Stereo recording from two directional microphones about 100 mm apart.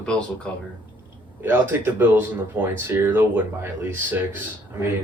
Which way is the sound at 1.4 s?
20° right (ahead or behind).